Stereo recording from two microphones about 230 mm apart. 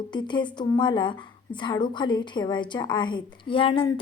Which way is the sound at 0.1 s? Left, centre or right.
Centre.